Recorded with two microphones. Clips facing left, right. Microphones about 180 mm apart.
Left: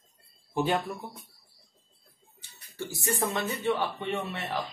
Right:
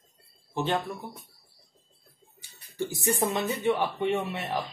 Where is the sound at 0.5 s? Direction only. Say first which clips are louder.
Left 1 dB; 10° left (ahead or behind).